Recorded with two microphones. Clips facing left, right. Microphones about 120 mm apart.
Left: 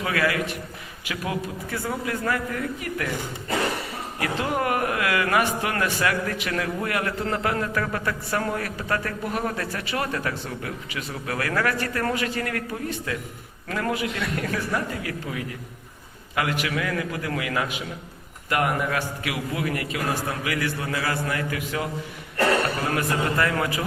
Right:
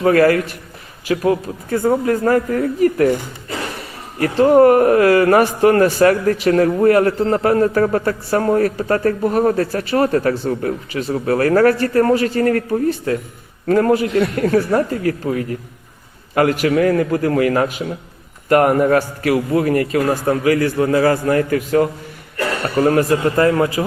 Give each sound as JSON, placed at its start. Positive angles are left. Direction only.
{"t": 0.0, "sound": "a man's voice", "side_deg": -45}
{"t": 4.2, "sound": "a man's voice", "side_deg": -40}